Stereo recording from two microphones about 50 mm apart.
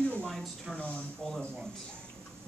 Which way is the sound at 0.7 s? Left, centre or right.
Left.